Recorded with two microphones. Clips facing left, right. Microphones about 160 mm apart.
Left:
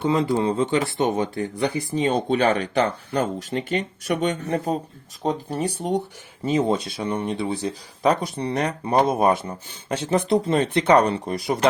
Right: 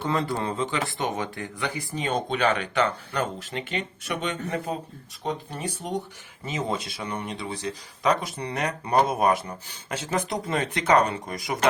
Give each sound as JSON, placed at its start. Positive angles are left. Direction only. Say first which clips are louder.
{"t": 0.0, "sound": "speech", "louder": "left 6 dB", "side_deg": 20}
{"t": 0.5, "sound": "speech", "louder": "left 6 dB", "side_deg": 35}